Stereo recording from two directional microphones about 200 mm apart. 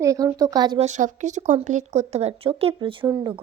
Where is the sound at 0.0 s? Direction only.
15° right (ahead or behind).